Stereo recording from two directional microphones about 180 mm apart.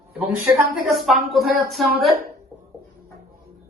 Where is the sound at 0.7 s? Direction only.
Centre (ahead or behind).